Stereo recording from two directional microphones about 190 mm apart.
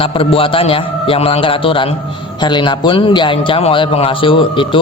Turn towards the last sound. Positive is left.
turn(degrees=25)  # may be behind; listen again after turning